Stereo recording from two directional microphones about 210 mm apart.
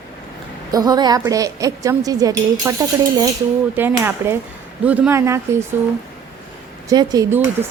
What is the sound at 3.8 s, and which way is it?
Speech, 10° right (ahead or behind).